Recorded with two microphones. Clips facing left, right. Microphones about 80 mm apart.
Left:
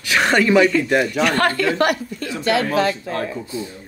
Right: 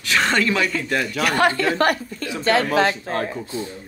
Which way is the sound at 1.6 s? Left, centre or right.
Right.